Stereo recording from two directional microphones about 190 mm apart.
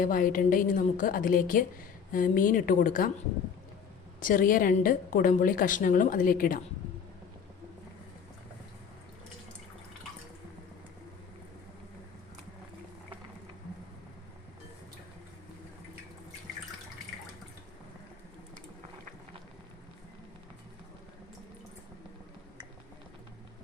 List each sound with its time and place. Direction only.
0.0 s a woman's voice: 45° left (ahead or behind)
4.2 s a woman's voice: 45° left (ahead or behind)